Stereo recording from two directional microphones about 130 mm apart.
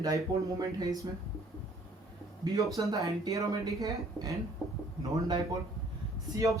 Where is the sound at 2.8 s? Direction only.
25° right (ahead or behind).